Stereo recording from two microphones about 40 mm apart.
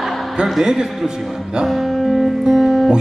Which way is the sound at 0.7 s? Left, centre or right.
Centre.